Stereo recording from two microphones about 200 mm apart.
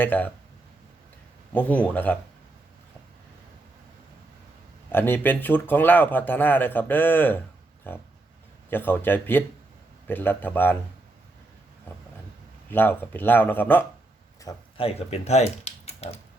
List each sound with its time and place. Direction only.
0.0 s speech: 10° left (ahead or behind)
1.5 s speech: 10° left (ahead or behind)
4.9 s speech: 10° left (ahead or behind)
12.7 s speech: 10° left (ahead or behind)
14.8 s speech: 30° left (ahead or behind)